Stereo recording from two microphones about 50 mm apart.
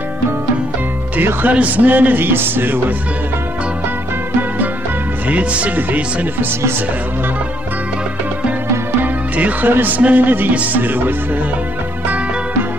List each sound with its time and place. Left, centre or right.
1.5 s music: right
5.3 s music: right
9.0 s music: right